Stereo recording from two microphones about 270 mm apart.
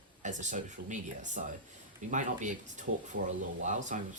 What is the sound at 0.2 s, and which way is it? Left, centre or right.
Speech, right.